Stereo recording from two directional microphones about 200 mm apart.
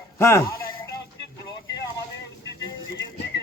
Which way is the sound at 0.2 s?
15° left (ahead or behind).